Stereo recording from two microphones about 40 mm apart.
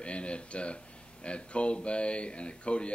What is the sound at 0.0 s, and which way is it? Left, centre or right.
Speech, left.